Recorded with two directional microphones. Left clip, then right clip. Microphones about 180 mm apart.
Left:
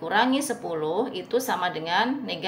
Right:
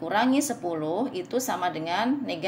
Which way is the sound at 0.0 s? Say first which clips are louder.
Left 1 dB; 45° right (ahead or behind).